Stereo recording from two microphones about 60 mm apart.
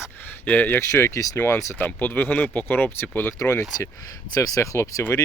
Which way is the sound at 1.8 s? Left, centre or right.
Left.